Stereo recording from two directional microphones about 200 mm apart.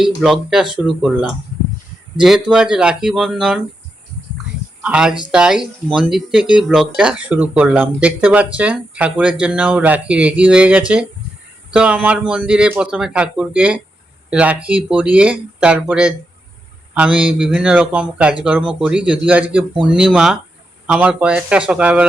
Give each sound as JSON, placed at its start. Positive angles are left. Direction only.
{"t": 0.0, "sound": "speech", "side_deg": 0}
{"t": 4.4, "sound": "a sound", "side_deg": -5}
{"t": 5.3, "sound": "speech", "side_deg": -5}